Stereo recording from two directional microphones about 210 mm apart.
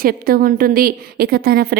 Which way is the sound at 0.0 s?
45° right (ahead or behind).